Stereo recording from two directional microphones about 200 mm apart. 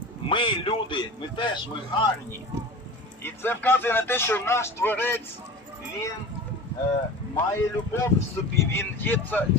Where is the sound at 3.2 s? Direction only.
10° left (ahead or behind).